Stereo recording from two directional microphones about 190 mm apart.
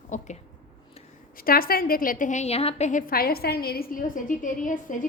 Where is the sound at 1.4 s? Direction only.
50° left (ahead or behind).